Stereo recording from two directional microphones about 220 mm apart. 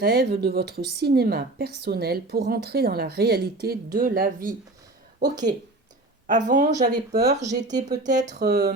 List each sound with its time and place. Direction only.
0.0 s speech: 45° right (ahead or behind)
6.2 s speech: 35° right (ahead or behind)
7.1 s speech: 45° right (ahead or behind)
7.5 s speech: 30° right (ahead or behind)
8.4 s speech: 45° right (ahead or behind)